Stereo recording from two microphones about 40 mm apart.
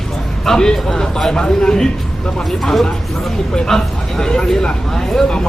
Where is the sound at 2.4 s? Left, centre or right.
Centre.